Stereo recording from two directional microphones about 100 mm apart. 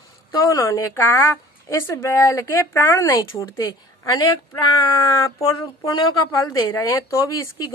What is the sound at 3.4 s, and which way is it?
Speech, 35° left (ahead or behind).